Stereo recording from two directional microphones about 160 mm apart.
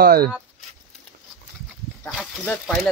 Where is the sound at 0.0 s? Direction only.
75° right (ahead or behind).